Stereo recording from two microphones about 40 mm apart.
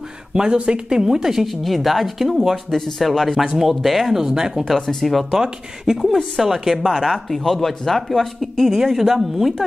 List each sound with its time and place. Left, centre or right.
0.3 s speech: right
1.5 s speech: centre
4.6 s speech: centre
5.3 s speech: centre
7.2 s speech: centre
8.6 s speech: centre